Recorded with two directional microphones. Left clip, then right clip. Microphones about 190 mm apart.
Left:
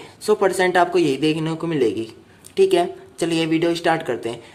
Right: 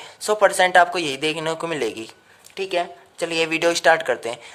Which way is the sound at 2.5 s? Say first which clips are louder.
Left 7 dB; 10° right (ahead or behind).